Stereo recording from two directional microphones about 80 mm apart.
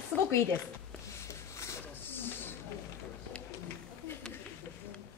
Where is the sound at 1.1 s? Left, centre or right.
Left.